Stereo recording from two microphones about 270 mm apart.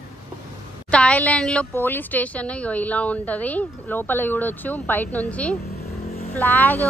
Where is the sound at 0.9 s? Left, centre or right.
Centre.